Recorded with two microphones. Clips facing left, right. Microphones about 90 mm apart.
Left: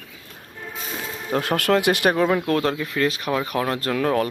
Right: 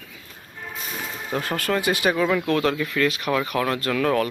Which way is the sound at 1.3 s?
65° left (ahead or behind).